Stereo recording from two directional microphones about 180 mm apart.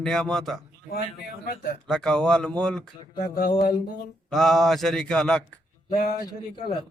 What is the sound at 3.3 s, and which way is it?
Mantra, 50° left (ahead or behind).